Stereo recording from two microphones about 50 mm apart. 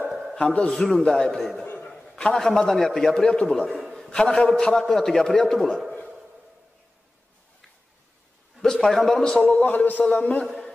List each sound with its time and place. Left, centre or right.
0.4 s a man's voice: left
0.7 s a man's voice: centre
0.9 s a man's voice: centre
1.3 s a man's voice: centre
1.8 s a sound: centre
2.3 s a man's voice: centre
8.6 s a man's voice: centre
9.4 s a man's voice: left